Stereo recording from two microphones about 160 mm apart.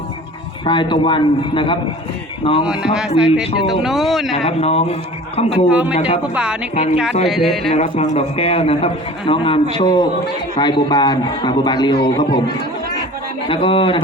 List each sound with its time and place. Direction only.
0.6 s a man's voice: 30° left (ahead or behind)
2.6 s speech: 5° right (ahead or behind)
4.4 s a man's voice: 40° left (ahead or behind)
5.6 s speech: 10° right (ahead or behind)
5.9 s a man's voice: 40° left (ahead or behind)
6.3 s speech: 5° right (ahead or behind)
7.7 s a man's voice: 45° left (ahead or behind); by 12.4 s 30° left (ahead or behind)
13.5 s a man's voice: 35° left (ahead or behind)